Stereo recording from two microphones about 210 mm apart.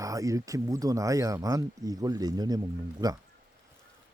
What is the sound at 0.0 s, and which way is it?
Speech, 15° right (ahead or behind).